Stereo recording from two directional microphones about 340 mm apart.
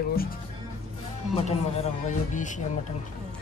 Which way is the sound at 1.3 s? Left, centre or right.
Centre.